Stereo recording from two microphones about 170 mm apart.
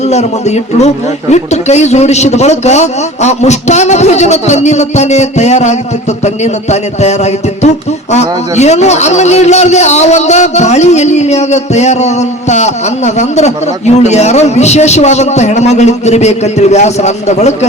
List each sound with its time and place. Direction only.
0.0 s a man's voice: 40° left (ahead or behind)